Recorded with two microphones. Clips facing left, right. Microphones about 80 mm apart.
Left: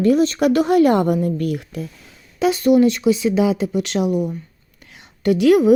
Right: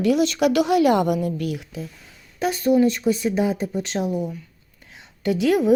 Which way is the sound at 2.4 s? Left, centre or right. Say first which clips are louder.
Left 4 dB; left.